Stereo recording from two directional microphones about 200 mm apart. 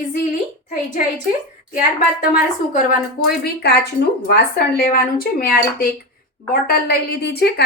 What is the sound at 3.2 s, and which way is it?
Speech, 50° left (ahead or behind).